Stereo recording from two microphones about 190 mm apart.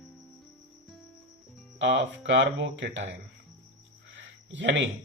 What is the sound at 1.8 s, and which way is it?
Speech, 70° right (ahead or behind).